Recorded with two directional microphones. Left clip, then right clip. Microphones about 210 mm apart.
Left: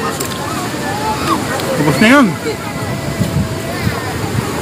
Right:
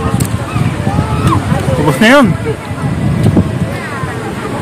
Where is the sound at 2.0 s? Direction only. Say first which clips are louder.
Right 3 dB; 40° right (ahead or behind).